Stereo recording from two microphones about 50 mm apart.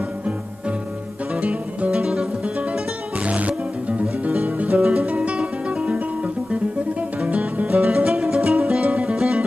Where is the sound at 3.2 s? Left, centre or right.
Right.